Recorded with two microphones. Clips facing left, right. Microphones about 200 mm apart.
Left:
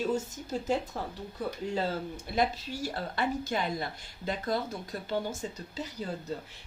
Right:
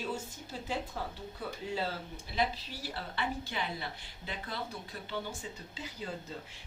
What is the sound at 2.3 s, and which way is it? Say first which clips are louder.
Speech: left 4 dB; 45° left (ahead or behind).